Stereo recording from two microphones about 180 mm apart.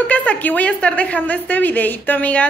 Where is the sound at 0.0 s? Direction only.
10° left (ahead or behind).